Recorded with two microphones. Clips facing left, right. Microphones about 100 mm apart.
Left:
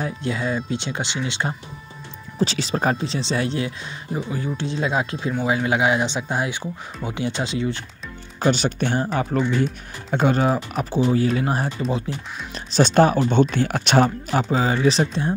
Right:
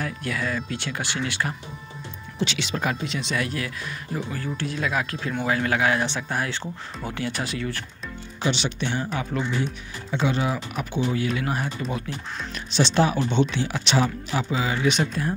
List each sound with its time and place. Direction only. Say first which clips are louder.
0.0 s speech: left 3 dB; 25° left (ahead or behind)
2.3 s speech: left 5 dB; 35° left (ahead or behind); by 7.8 s 20° left (ahead or behind)
8.4 s speech: left 6 dB; 45° left (ahead or behind)
12.5 s speech: left 5 dB; 45° left (ahead or behind)
14.5 s speech: left 4 dB; 40° left (ahead or behind)